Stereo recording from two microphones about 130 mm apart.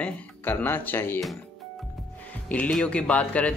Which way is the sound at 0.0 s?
15° left (ahead or behind).